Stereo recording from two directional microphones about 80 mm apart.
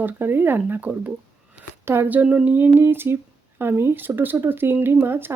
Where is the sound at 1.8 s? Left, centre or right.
Right.